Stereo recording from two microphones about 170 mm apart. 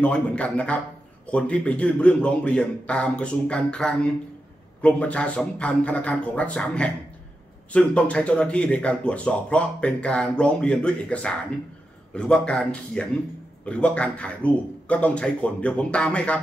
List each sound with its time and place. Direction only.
0.0 s a man's voice: 5° left (ahead or behind)